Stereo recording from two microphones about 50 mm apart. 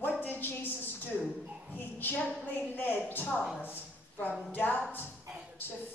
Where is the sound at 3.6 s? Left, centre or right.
Left.